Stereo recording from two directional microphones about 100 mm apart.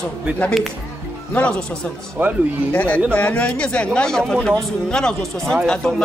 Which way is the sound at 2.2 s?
20° right (ahead or behind).